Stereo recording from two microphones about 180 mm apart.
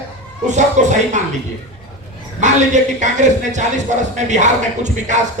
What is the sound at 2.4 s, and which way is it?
Speech, 40° right (ahead or behind).